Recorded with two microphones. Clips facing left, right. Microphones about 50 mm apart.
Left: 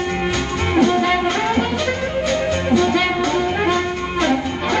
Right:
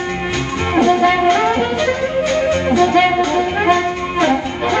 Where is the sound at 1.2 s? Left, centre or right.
Right.